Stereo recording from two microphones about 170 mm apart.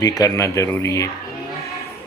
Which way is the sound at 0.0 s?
20° left (ahead or behind).